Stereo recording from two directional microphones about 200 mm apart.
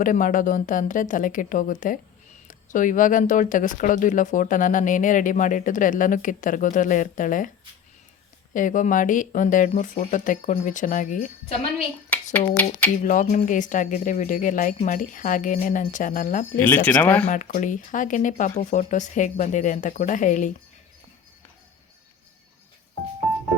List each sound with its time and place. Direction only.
0.0 s speech: 40° left (ahead or behind)
8.5 s speech: 40° left (ahead or behind)
12.1 s a sound: 5° left (ahead or behind)
13.1 s speech: 40° left (ahead or behind)
16.6 s speech: 10° left (ahead or behind)
17.2 s speech: 40° left (ahead or behind)